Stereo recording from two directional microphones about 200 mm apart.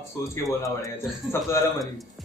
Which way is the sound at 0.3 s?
15° left (ahead or behind).